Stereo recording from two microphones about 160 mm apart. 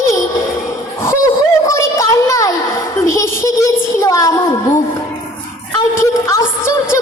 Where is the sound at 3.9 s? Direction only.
20° left (ahead or behind).